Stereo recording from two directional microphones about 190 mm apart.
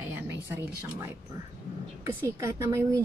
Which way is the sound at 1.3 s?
15° right (ahead or behind).